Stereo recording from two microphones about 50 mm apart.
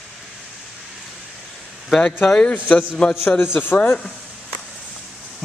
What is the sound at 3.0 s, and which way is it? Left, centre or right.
Speech, left.